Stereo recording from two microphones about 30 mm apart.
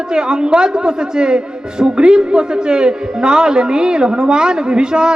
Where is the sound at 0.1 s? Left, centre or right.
Right.